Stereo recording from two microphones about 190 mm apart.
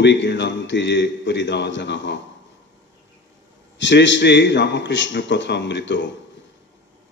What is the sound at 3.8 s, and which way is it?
A man's voice, 70° left (ahead or behind).